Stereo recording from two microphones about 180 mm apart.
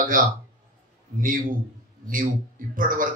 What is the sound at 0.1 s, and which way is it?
A man's voice, 50° right (ahead or behind).